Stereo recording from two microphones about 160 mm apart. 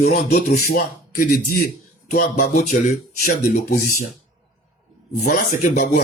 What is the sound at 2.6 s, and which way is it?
Speech, 50° left (ahead or behind).